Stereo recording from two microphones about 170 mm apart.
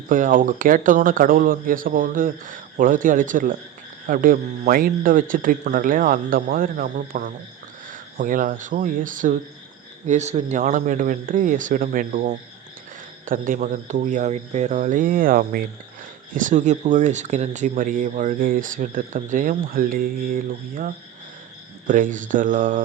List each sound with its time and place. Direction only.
0.1 s speech: 50° right (ahead or behind)
16.3 s speech: 50° right (ahead or behind)